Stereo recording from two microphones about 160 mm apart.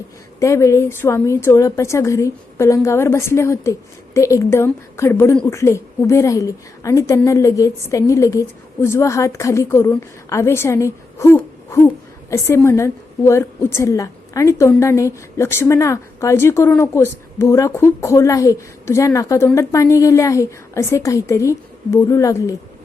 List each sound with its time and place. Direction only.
0.3 s a woman's voice: 20° left (ahead or behind)